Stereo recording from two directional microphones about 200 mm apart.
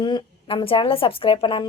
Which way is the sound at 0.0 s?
25° left (ahead or behind).